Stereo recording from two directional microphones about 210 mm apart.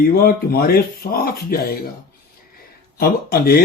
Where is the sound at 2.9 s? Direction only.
45° left (ahead or behind).